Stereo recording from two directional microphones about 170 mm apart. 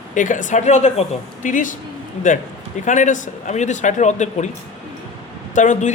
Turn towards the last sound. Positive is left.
turn(degrees=45)  # may be behind; listen again after turning